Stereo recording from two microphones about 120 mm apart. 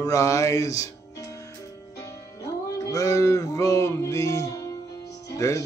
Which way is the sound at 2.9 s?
30° left (ahead or behind).